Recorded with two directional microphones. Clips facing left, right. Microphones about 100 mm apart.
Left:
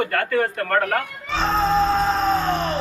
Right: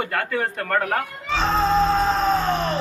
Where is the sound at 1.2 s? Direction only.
Centre (ahead or behind).